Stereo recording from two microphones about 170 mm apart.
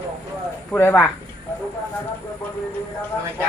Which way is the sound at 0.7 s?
10° left (ahead or behind).